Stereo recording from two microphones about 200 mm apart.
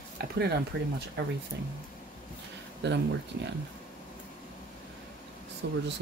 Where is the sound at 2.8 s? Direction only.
60° right (ahead or behind).